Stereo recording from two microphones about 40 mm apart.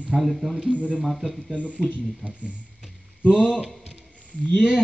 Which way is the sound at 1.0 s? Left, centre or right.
Centre.